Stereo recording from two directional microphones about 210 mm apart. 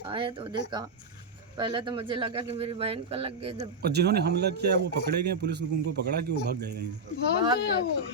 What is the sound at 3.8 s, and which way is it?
Speech, 50° right (ahead or behind).